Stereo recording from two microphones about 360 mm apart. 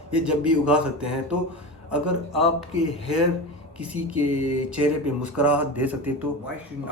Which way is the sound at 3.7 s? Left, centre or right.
Centre.